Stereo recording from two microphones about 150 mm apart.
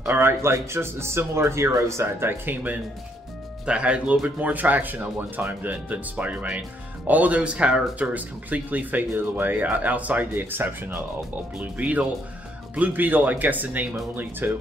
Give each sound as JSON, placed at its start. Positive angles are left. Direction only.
{"t": 0.0, "sound": "speech", "side_deg": -15}